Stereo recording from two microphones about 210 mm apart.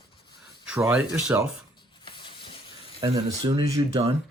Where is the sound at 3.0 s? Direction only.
25° right (ahead or behind).